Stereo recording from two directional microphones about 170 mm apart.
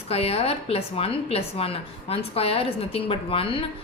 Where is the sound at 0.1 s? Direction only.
35° left (ahead or behind).